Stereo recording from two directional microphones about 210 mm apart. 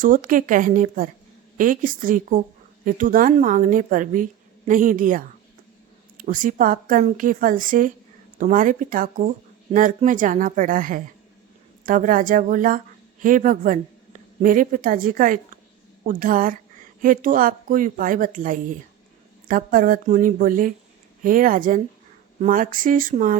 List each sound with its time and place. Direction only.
0.0 s a woman's voice: 40° right (ahead or behind)